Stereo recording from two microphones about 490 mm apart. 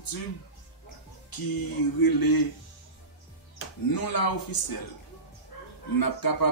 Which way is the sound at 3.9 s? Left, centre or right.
Left.